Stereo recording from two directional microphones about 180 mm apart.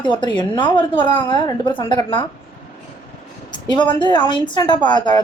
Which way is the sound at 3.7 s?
25° left (ahead or behind).